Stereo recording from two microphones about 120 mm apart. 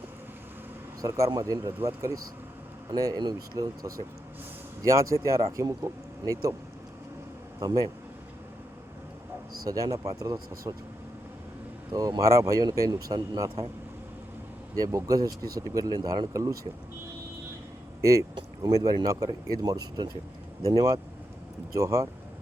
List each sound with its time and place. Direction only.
1.0 s speech: 30° right (ahead or behind)
4.8 s speech: 25° right (ahead or behind)
7.6 s speech: 30° right (ahead or behind)
9.6 s speech: 30° right (ahead or behind)
11.9 s speech: 35° right (ahead or behind)
14.8 s speech: 30° right (ahead or behind)
18.3 s speech: 30° right (ahead or behind)